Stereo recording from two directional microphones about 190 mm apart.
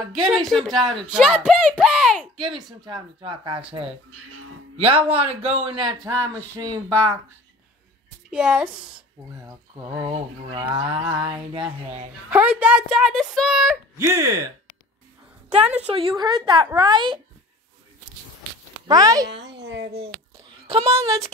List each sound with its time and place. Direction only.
0.1 s speech: centre (ahead or behind)
2.8 s speech: 25° right (ahead or behind)
6.9 s speech: 5° left (ahead or behind)
8.3 s speech: 5° right (ahead or behind)
9.4 s speech: 25° right (ahead or behind)
12.3 s speech: 10° right (ahead or behind)
13.9 s speech: 15° right (ahead or behind)
15.9 s speech: 30° right (ahead or behind)
18.9 s speech: 20° right (ahead or behind)
19.2 s a woman's voice: 65° right (ahead or behind)
19.9 s a sound: 30° right (ahead or behind)